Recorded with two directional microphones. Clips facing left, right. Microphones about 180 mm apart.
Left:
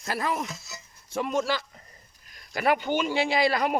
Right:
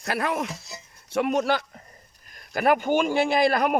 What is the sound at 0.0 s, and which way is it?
A man's voice, 65° right (ahead or behind).